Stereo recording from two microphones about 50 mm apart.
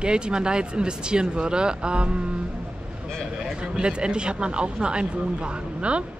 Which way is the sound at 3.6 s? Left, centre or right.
Centre.